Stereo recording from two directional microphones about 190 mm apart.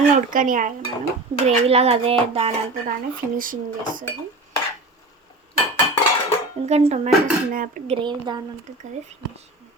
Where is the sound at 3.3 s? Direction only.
45° right (ahead or behind).